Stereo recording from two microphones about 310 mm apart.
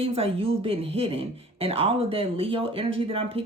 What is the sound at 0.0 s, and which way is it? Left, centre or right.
Speech, centre.